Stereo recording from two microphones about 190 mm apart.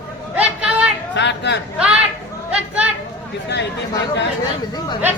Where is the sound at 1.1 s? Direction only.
65° left (ahead or behind).